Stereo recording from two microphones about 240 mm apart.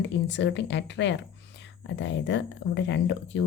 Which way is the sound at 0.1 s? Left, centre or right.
Left.